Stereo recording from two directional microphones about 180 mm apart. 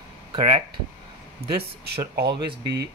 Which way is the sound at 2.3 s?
25° right (ahead or behind).